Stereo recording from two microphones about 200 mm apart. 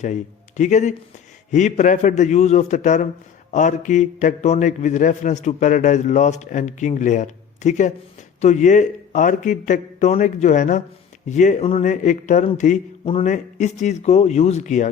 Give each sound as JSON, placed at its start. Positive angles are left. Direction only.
{"t": 0.0, "sound": "a man's voice", "side_deg": 40}